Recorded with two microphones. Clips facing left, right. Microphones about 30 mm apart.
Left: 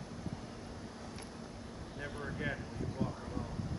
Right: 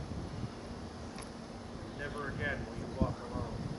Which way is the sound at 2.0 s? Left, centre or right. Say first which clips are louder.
Right 2 dB; centre.